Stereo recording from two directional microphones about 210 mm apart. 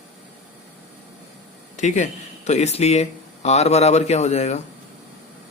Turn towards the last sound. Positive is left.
turn(degrees=30)  # may be behind; listen again after turning